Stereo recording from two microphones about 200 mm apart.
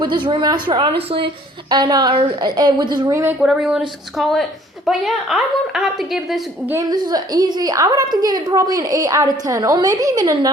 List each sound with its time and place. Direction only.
0.3 s a woman's voice: 25° right (ahead or behind)
3.4 s a woman's voice: 5° right (ahead or behind)
6.7 s a woman's voice: 20° right (ahead or behind)